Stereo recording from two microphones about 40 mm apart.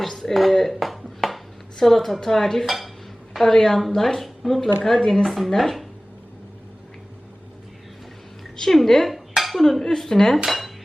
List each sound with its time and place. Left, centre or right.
0.0 s dishes: centre
1.8 s a woman's voice: centre
3.3 s a woman's voice: centre
5.2 s speech: centre
8.5 s dishes: centre
9.6 s a woman's voice: centre